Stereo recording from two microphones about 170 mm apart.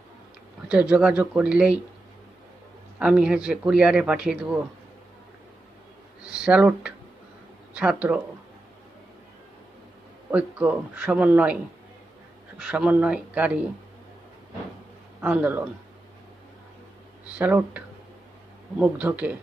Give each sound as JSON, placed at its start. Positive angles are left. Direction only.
{"t": 0.7, "sound": "speech", "side_deg": -5}
{"t": 3.0, "sound": "speech", "side_deg": -5}
{"t": 6.2, "sound": "speech", "side_deg": -5}
{"t": 10.3, "sound": "speech", "side_deg": -10}
{"t": 12.5, "sound": "speech", "side_deg": -5}
{"t": 15.2, "sound": "speech", "side_deg": -10}
{"t": 17.2, "sound": "speech", "side_deg": -10}